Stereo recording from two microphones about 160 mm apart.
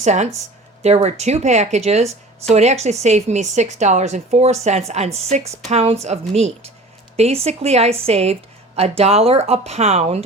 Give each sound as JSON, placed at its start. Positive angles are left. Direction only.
{"t": 0.0, "sound": "speech", "side_deg": -45}